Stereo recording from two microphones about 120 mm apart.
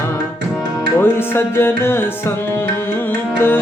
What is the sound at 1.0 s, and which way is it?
Music, 20° left (ahead or behind).